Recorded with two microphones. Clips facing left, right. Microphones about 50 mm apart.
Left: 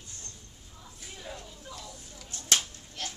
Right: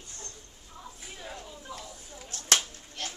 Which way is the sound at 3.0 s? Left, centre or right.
Centre.